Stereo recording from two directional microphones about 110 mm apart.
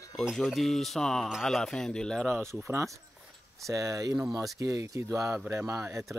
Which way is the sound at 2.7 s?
25° right (ahead or behind).